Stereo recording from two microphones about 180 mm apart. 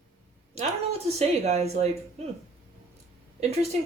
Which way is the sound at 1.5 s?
35° right (ahead or behind).